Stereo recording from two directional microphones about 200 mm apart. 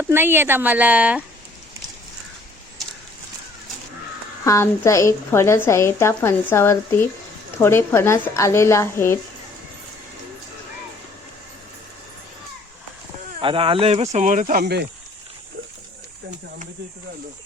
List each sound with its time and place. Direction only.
0.0 s speech: 10° right (ahead or behind)
4.4 s a woman's voice: 15° left (ahead or behind)
13.4 s speech: 25° right (ahead or behind)
14.6 s speech: 55° right (ahead or behind)